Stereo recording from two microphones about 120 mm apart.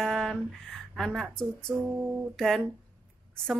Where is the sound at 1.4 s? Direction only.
Centre (ahead or behind).